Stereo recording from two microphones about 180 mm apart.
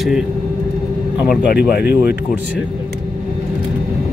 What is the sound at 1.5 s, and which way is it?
Speech, 60° left (ahead or behind).